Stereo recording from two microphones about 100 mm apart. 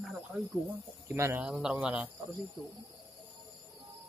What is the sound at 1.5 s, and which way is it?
Speech, 5° right (ahead or behind).